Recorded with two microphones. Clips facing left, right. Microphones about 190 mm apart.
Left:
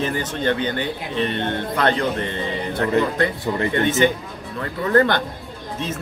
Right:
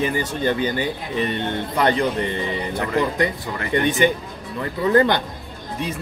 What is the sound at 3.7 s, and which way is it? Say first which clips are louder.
Speech: right 2 dB; 15° right (ahead or behind).